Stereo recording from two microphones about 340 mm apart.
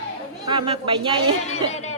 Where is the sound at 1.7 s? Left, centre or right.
Centre.